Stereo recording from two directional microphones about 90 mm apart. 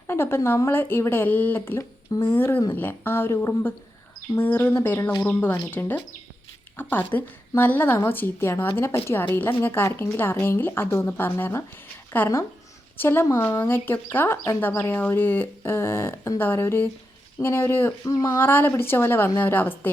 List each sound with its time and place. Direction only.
0.1 s a woman's voice: 25° left (ahead or behind)
18.1 s speech: 40° left (ahead or behind)
18.3 s a woman's voice: 25° left (ahead or behind)